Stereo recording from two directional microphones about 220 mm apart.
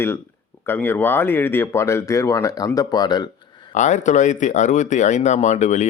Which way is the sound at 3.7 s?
35° left (ahead or behind).